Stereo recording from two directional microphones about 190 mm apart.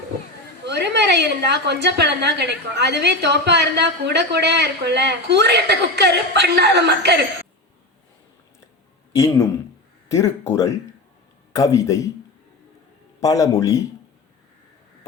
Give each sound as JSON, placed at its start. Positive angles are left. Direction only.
{"t": 0.6, "sound": "a woman's voice", "side_deg": -65}
{"t": 9.1, "sound": "speech", "side_deg": 15}
{"t": 13.1, "sound": "speech", "side_deg": 15}